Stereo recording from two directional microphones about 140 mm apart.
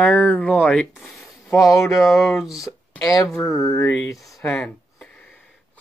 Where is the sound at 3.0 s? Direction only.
25° left (ahead or behind).